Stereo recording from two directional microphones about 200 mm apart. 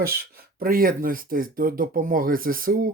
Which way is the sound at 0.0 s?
50° right (ahead or behind).